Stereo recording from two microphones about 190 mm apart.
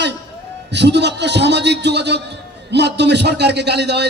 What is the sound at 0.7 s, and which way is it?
A man's voice, 65° right (ahead or behind).